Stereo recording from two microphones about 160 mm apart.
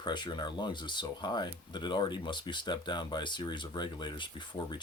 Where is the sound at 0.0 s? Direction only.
30° left (ahead or behind).